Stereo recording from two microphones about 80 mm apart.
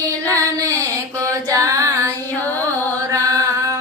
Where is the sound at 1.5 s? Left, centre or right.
Right.